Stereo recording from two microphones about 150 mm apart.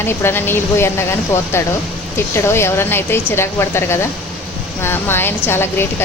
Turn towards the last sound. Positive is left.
turn(degrees=15)  # may be behind; listen again after turning